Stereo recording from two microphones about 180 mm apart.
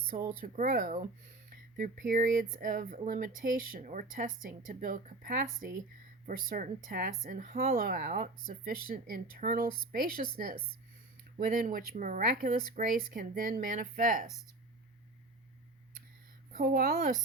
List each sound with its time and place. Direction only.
0.3 s speech: 50° right (ahead or behind)
16.5 s speech: 50° right (ahead or behind)